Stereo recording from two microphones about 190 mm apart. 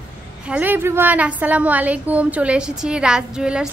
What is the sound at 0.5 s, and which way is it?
A woman's voice, 10° right (ahead or behind).